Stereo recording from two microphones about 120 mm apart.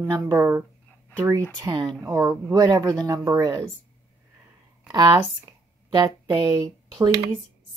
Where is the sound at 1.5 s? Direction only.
35° right (ahead or behind).